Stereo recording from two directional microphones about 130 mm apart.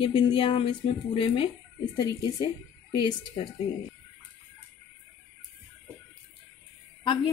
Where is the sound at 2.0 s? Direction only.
30° left (ahead or behind).